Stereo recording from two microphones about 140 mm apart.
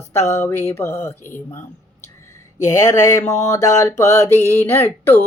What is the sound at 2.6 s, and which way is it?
Speech, 20° left (ahead or behind).